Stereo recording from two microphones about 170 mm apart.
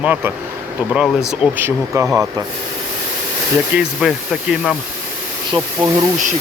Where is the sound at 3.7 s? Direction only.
5° right (ahead or behind).